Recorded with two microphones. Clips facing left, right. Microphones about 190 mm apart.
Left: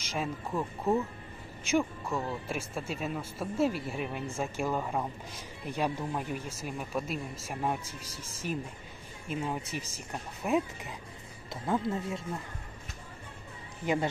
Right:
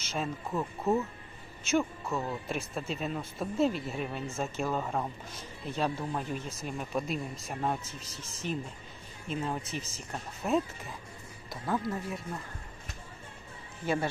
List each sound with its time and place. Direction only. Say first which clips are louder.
0.0 s speech: even; 10° left (ahead or behind)
11.6 s speech: left 2 dB; 25° left (ahead or behind)
13.8 s speech: left 1 dB; 15° left (ahead or behind)